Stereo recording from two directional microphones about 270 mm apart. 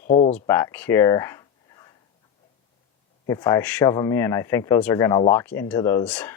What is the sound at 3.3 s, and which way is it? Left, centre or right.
Speech, centre.